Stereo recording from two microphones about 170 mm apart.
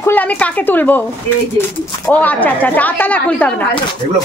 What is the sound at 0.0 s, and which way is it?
Speech, 10° left (ahead or behind).